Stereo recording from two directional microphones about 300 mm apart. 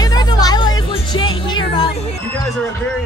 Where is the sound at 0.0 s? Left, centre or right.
Centre.